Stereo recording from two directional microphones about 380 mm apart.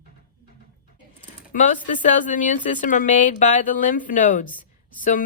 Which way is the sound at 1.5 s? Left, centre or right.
Centre.